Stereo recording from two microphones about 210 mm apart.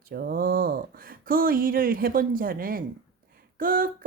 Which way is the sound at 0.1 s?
45° right (ahead or behind).